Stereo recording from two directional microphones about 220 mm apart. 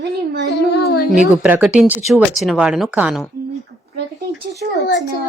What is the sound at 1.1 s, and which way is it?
Speech, 5° right (ahead or behind).